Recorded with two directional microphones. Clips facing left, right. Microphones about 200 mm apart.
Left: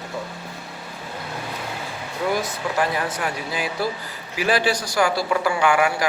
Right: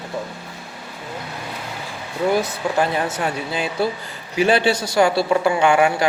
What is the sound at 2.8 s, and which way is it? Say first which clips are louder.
A man's voice: right 3 dB; 25° right (ahead or behind).